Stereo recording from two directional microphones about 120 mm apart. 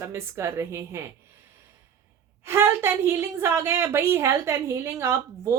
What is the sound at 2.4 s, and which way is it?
Speech, 20° right (ahead or behind).